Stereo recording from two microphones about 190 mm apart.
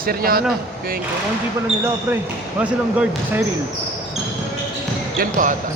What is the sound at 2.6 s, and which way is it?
Speech, 5° right (ahead or behind).